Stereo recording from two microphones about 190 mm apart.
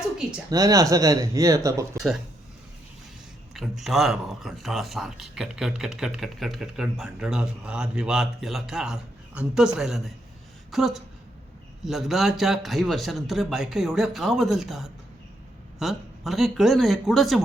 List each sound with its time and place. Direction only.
0.5 s speech: 20° right (ahead or behind)
2.0 s speech: centre (ahead or behind)
3.5 s speech: centre (ahead or behind)